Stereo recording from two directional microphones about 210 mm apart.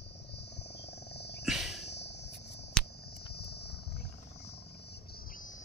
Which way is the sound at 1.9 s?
55° left (ahead or behind).